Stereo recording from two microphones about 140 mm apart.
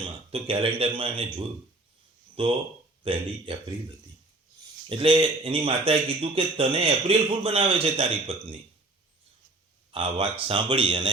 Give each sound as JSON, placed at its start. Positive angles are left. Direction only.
{"t": 0.0, "sound": "a man's voice", "side_deg": -40}
{"t": 2.4, "sound": "a man's voice", "side_deg": -40}
{"t": 4.9, "sound": "a man's voice", "side_deg": -35}
{"t": 9.9, "sound": "a man's voice", "side_deg": -40}